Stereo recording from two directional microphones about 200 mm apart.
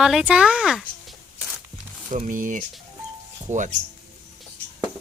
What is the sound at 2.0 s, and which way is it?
Speech, 40° right (ahead or behind).